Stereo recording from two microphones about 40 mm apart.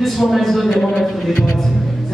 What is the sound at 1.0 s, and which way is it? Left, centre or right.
Speech, centre.